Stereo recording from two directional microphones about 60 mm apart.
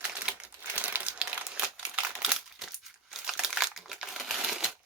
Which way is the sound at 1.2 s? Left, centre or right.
Centre.